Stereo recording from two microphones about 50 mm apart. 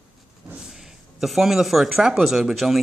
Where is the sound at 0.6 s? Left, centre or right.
Centre.